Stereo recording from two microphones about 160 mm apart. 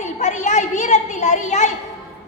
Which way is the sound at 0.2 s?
45° left (ahead or behind).